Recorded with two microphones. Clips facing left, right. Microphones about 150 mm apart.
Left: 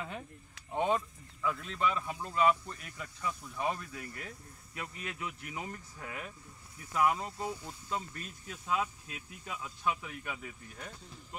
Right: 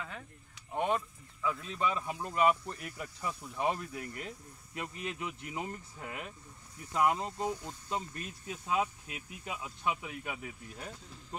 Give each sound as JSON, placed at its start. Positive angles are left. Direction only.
{"t": 0.7, "sound": "speech", "side_deg": -5}
{"t": 1.8, "sound": "speech", "side_deg": -15}